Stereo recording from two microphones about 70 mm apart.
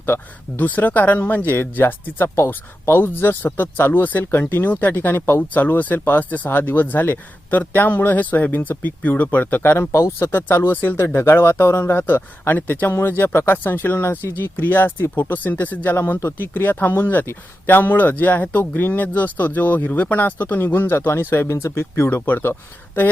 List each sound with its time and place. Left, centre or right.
0.0 s speech: left
9.9 s speech: left